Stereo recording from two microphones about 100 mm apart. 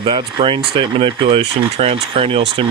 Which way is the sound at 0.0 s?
55° right (ahead or behind).